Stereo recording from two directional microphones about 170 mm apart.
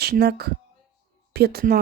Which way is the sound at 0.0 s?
70° right (ahead or behind).